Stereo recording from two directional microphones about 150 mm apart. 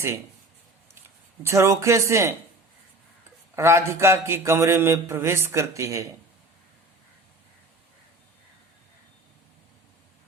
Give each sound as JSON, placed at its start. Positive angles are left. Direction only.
{"t": 1.4, "sound": "speech", "side_deg": -20}
{"t": 3.5, "sound": "a man's voice", "side_deg": -15}